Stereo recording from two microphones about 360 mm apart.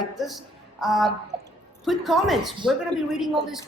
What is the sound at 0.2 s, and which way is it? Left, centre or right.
A woman's voice, centre.